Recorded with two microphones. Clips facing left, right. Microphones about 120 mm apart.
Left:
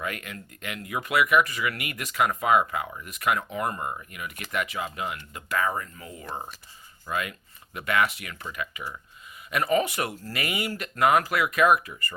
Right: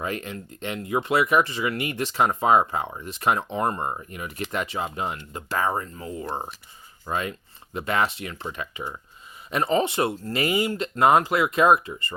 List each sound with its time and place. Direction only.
0.0 s speech: 30° right (ahead or behind)